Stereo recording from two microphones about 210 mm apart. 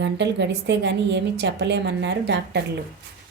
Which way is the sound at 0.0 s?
55° right (ahead or behind).